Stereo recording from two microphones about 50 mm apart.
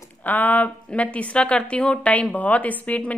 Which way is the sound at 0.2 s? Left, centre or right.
Left.